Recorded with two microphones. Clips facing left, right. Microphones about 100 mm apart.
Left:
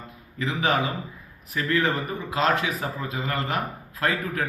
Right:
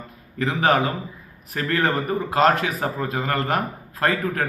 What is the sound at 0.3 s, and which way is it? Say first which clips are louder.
A man's voice: right 5 dB; 50° right (ahead or behind).